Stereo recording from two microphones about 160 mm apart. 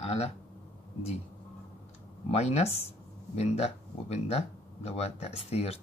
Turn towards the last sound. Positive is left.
turn(degrees=40)  # may be behind; listen again after turning